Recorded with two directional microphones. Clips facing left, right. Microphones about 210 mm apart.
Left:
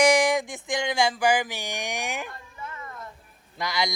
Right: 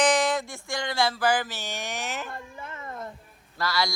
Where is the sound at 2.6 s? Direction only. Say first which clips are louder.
Even; 25° right (ahead or behind).